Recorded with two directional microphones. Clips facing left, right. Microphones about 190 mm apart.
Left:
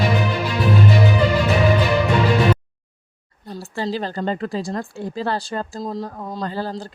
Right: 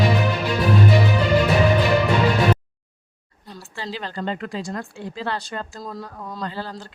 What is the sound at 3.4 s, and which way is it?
Speech, 45° left (ahead or behind).